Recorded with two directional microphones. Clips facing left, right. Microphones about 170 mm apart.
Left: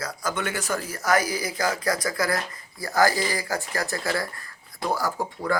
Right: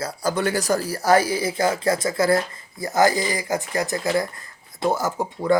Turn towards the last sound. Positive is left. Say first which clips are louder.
# right 6 dB
turn(degrees=-20)  # may be behind; listen again after turning